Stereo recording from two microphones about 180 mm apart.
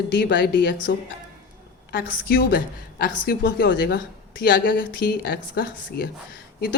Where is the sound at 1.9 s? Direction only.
55° left (ahead or behind).